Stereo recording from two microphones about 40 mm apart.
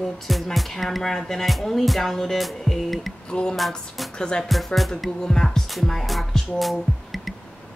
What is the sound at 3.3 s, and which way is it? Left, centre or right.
Speech, left.